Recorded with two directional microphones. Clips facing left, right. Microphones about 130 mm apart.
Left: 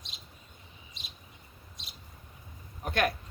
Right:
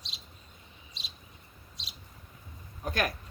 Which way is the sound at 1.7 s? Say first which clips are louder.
Right 2 dB; 50° left (ahead or behind).